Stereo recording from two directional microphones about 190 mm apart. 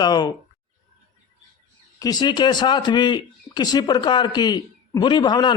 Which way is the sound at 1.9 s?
20° left (ahead or behind).